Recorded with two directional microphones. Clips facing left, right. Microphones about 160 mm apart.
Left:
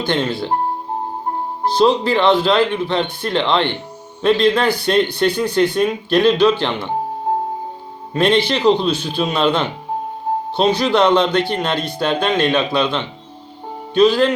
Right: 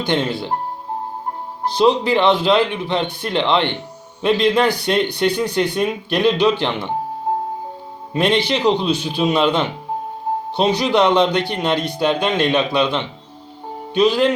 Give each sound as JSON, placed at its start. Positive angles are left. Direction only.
{"t": 0.0, "sound": "speech", "side_deg": -20}
{"t": 1.6, "sound": "speech", "side_deg": -15}
{"t": 8.1, "sound": "speech", "side_deg": -15}